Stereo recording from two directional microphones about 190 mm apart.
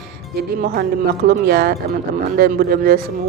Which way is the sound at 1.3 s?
55° right (ahead or behind).